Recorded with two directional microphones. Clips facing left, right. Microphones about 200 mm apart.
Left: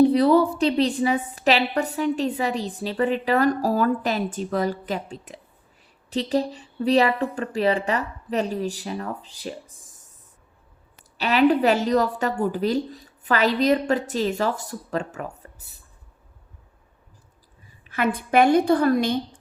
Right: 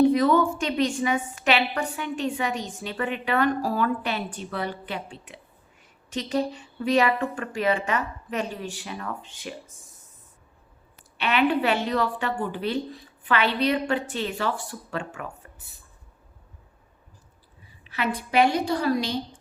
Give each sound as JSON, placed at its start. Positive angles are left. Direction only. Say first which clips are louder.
{"t": 0.0, "sound": "a woman's voice", "louder": "left 3 dB", "side_deg": 35}
{"t": 11.2, "sound": "a woman's voice", "louder": "left 4 dB", "side_deg": 35}
{"t": 17.8, "sound": "a woman's voice", "louder": "left 4 dB", "side_deg": 50}